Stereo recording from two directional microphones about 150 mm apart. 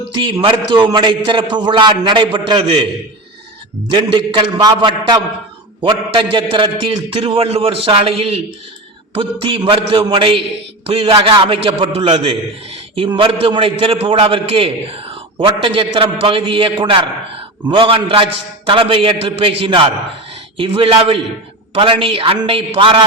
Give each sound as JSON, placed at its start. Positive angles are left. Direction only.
{"t": 0.2, "sound": "a man's voice", "side_deg": -30}
{"t": 3.9, "sound": "a man's voice", "side_deg": -30}